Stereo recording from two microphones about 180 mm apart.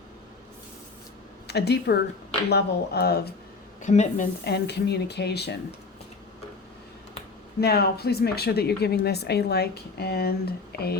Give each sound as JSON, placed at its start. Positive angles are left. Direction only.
{"t": 1.5, "sound": "speech", "side_deg": 65}
{"t": 3.8, "sound": "a woman's voice", "side_deg": 40}
{"t": 4.4, "sound": "speech", "side_deg": 65}
{"t": 7.6, "sound": "speech", "side_deg": 60}